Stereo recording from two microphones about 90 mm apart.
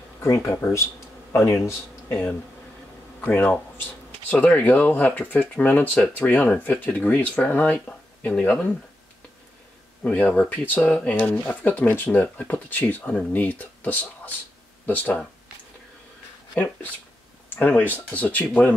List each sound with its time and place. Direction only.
0.2 s a man's voice: 30° left (ahead or behind)
10.0 s speech: 20° left (ahead or behind)
16.5 s speech: 15° left (ahead or behind)